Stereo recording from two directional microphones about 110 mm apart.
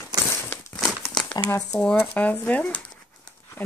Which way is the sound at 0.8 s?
Centre (ahead or behind).